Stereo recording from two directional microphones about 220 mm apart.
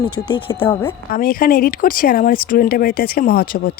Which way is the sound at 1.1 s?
40° left (ahead or behind).